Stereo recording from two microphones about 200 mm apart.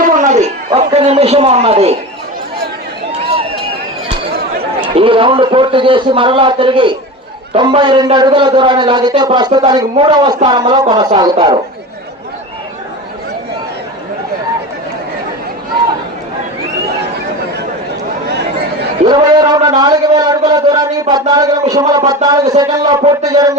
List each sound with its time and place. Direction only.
0.2 s a sound: 35° right (ahead or behind)
0.9 s a man's voice: 30° right (ahead or behind)
4.8 s a man's voice: 25° right (ahead or behind)
19.0 s a man's voice: 20° right (ahead or behind)